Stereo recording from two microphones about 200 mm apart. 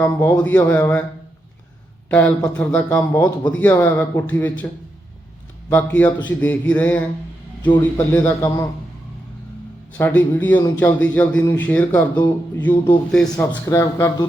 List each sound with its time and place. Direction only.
0.0 s a man's voice: 10° left (ahead or behind)
2.0 s a man's voice: 10° left (ahead or behind)
5.6 s a man's voice: 10° left (ahead or behind)
10.0 s a man's voice: 10° left (ahead or behind)
13.7 s a man's voice: 15° left (ahead or behind)